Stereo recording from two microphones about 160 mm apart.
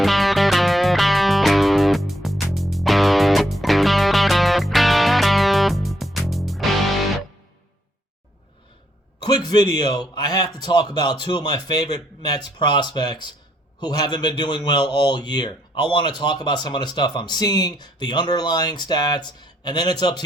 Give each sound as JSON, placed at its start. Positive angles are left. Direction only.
{"t": 0.0, "sound": "music", "side_deg": 0}
{"t": 9.2, "sound": "a man's voice", "side_deg": 25}